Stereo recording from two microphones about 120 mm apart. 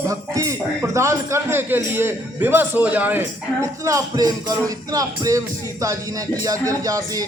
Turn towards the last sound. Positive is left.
turn(degrees=-30)  # may be behind; listen again after turning